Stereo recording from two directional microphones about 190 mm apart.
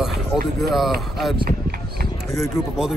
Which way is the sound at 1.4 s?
55° right (ahead or behind).